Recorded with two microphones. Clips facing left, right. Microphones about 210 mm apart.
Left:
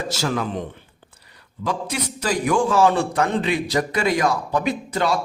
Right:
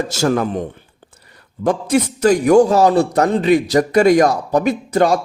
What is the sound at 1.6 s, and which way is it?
A man's voice, 50° right (ahead or behind).